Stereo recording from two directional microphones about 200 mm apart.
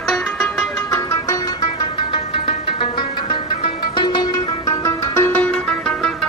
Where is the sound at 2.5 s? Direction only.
25° left (ahead or behind).